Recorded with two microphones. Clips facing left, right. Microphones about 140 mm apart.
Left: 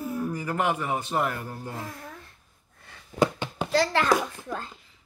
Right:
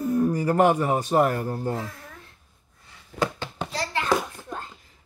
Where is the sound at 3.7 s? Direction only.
90° left.